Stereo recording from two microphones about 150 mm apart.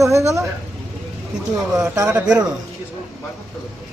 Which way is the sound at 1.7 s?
20° right (ahead or behind).